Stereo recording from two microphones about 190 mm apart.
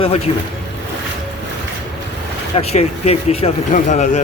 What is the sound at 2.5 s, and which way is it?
Speech, 30° left (ahead or behind).